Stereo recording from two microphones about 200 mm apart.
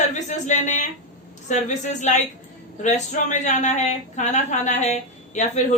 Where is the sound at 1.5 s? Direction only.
40° left (ahead or behind).